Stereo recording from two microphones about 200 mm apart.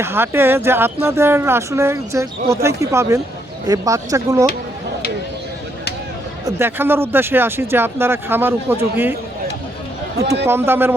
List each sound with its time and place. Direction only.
0.0 s speech: 10° right (ahead or behind)
6.4 s speech: 10° right (ahead or behind)
10.4 s speech: 10° right (ahead or behind)